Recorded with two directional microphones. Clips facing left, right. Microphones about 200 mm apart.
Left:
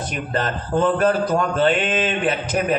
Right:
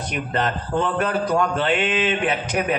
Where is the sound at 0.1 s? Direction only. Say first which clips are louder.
Right 2 dB; 40° left (ahead or behind).